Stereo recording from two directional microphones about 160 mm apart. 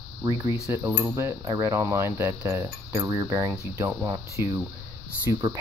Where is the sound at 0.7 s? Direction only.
15° right (ahead or behind).